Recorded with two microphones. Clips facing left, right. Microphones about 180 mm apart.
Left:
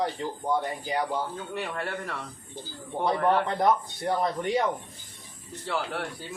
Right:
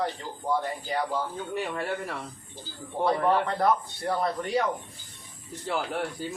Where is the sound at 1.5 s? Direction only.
10° right (ahead or behind).